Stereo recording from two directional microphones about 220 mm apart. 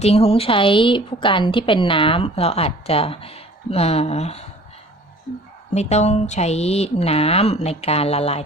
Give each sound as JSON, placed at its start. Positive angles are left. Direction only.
{"t": 0.0, "sound": "a woman's voice", "side_deg": 25}
{"t": 5.7, "sound": "a woman's voice", "side_deg": 30}